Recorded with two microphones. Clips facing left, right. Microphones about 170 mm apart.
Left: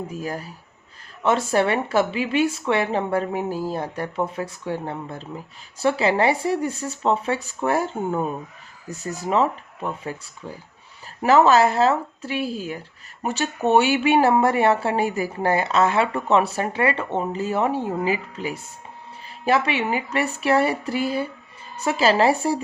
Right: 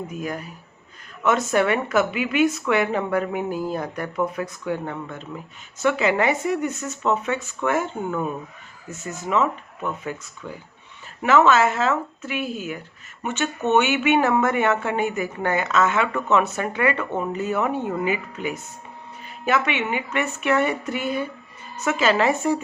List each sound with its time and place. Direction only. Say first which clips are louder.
0.1 s speech: even; 30° left (ahead or behind)